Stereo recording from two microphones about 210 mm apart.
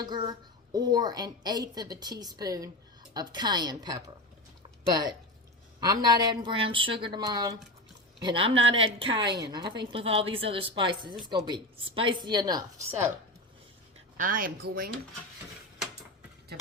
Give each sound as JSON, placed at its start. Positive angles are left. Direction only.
{"t": 0.0, "sound": "a woman's voice", "side_deg": -20}
{"t": 5.8, "sound": "a woman's voice", "side_deg": -20}
{"t": 14.2, "sound": "a woman's voice", "side_deg": -40}